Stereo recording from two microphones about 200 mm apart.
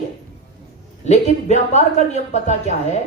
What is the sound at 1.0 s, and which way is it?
Speech, 35° left (ahead or behind).